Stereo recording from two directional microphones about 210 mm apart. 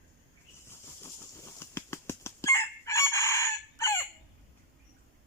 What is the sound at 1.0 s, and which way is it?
Chicken, 15° left (ahead or behind).